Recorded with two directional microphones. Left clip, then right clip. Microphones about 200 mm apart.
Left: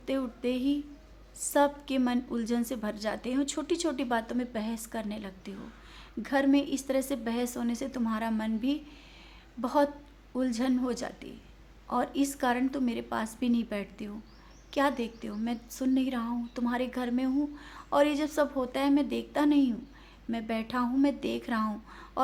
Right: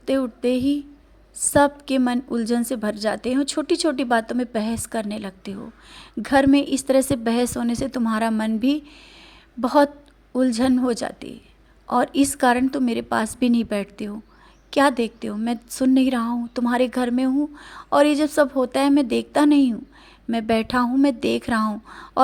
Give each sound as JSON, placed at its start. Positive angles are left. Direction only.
{"t": 0.0, "sound": "a woman's voice", "side_deg": -35}